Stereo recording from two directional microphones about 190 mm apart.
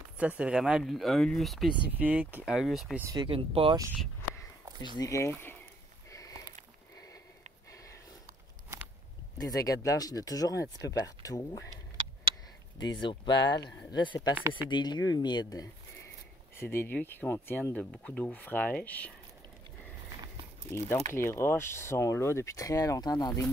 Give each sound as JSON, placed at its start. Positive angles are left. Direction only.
{"t": 0.2, "sound": "speech", "side_deg": -5}
{"t": 3.0, "sound": "speech", "side_deg": -15}
{"t": 3.3, "sound": "speech", "side_deg": -30}
{"t": 4.9, "sound": "speech", "side_deg": 15}
{"t": 6.0, "sound": "a sound", "side_deg": 15}
{"t": 9.4, "sound": "speech", "side_deg": 20}
{"t": 13.0, "sound": "speech", "side_deg": 25}
{"t": 21.1, "sound": "speech", "side_deg": 15}